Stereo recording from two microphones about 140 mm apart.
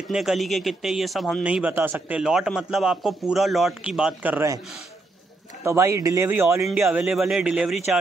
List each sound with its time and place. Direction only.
0.1 s speech: centre (ahead or behind)
5.6 s speech: 20° right (ahead or behind); by 8.0 s 5° right (ahead or behind)